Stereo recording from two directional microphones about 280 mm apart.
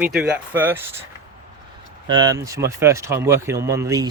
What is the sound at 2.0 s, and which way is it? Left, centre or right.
Speech, centre.